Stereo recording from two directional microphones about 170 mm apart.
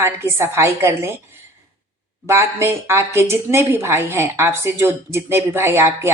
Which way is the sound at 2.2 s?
15° right (ahead or behind).